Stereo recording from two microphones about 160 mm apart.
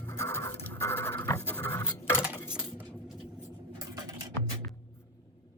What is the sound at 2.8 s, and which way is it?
Vehicle, 5° left (ahead or behind).